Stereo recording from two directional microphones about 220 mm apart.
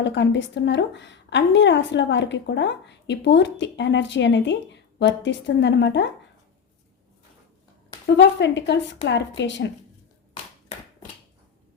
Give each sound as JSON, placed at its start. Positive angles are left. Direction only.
{"t": 0.0, "sound": "a woman's voice", "side_deg": 55}
{"t": 8.0, "sound": "a woman's voice", "side_deg": 55}